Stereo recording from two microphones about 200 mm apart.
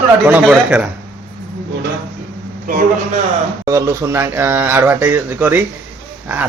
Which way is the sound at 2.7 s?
40° right (ahead or behind).